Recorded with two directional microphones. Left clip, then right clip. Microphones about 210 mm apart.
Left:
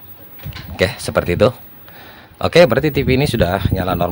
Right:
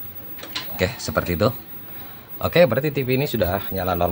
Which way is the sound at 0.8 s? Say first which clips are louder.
Left 7 dB; 40° left (ahead or behind).